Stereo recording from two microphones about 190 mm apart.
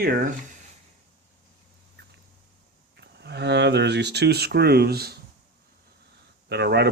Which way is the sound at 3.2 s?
65° right (ahead or behind).